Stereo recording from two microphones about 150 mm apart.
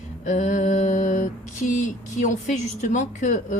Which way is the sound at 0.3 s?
55° left (ahead or behind).